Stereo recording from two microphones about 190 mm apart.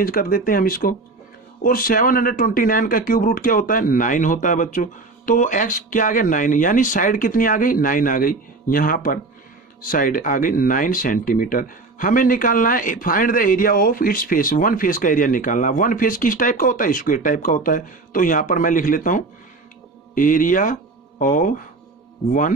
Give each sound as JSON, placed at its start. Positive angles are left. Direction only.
{"t": 0.0, "sound": "speech", "side_deg": 50}